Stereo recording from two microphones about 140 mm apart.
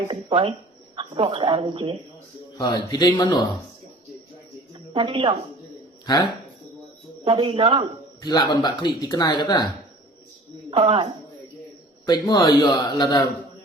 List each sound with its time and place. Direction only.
0.1 s speech: 40° right (ahead or behind)
2.6 s speech: 25° left (ahead or behind)
4.7 s a sound: 40° right (ahead or behind)
7.3 s speech: 40° right (ahead or behind)
8.2 s speech: 30° left (ahead or behind)
10.7 s speech: 40° right (ahead or behind)
12.0 s speech: 30° left (ahead or behind)